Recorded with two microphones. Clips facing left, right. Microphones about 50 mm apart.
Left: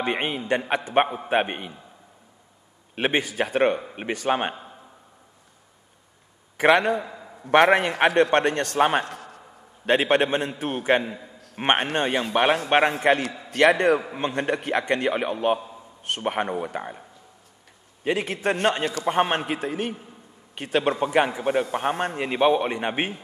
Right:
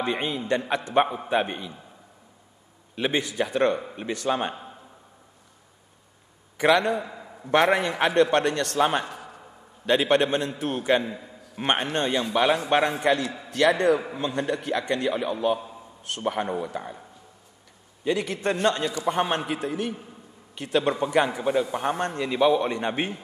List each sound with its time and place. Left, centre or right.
0.0 s a man's voice: left
3.0 s a man's voice: left
7.4 s a man's voice: left
9.0 s a sound: left
10.1 s a man's voice: left
18.0 s a man's voice: left